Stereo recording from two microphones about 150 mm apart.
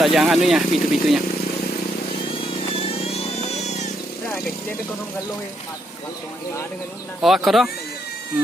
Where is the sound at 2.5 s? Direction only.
40° left (ahead or behind).